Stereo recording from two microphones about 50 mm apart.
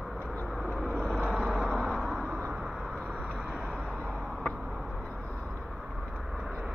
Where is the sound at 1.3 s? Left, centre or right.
Centre.